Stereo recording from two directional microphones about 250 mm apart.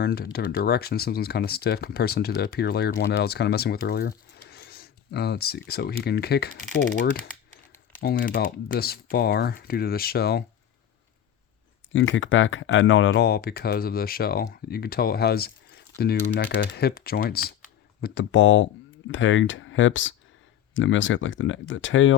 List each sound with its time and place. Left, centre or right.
0.0 s speech: left
11.9 s speech: left